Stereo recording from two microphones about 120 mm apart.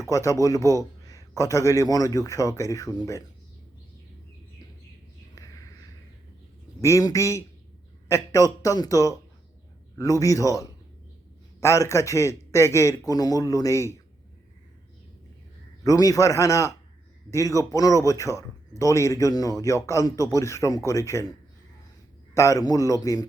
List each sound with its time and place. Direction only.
0.1 s a man's voice: 25° left (ahead or behind)
6.8 s speech: 25° left (ahead or behind)
15.8 s speech: 30° left (ahead or behind)
22.4 s speech: 25° left (ahead or behind)